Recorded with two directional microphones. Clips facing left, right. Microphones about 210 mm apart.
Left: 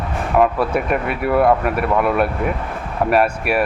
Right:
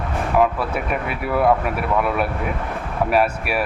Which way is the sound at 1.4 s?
55° left (ahead or behind).